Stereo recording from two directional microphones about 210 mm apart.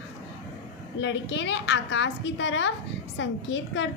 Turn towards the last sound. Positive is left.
turn(degrees=60)  # may be behind; listen again after turning